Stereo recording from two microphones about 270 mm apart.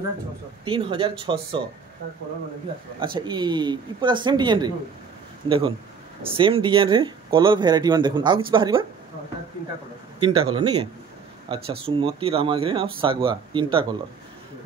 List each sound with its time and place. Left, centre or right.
0.7 s speech: centre
3.2 s speech: centre
10.5 s speech: centre